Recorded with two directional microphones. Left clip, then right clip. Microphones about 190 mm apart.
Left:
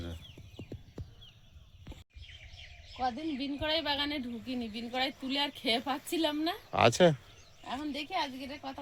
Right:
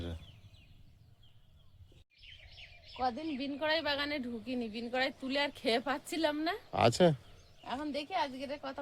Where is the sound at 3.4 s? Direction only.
35° right (ahead or behind).